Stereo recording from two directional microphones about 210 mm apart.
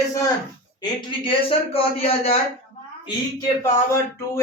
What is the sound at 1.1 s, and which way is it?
Speech, 25° left (ahead or behind).